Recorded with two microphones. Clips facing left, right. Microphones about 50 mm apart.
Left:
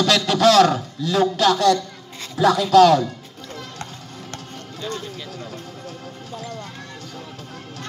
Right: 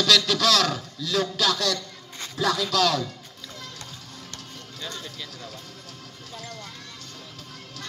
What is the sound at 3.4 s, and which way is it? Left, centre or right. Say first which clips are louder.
Music: left 7 dB; left.